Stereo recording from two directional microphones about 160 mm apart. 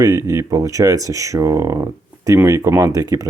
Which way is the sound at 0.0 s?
20° right (ahead or behind).